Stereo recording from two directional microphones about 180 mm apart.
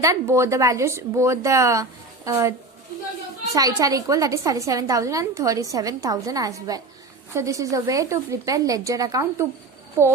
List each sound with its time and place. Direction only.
0.0 s speech: 15° right (ahead or behind)
3.8 s a woman's voice: 20° right (ahead or behind)